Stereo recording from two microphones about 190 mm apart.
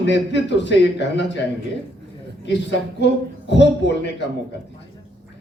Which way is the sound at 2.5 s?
65° left (ahead or behind).